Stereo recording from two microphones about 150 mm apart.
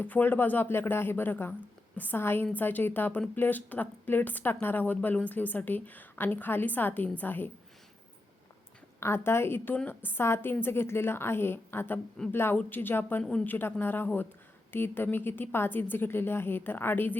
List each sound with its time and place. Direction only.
0.0 s a woman's voice: 10° left (ahead or behind)
9.0 s a woman's voice: 15° left (ahead or behind)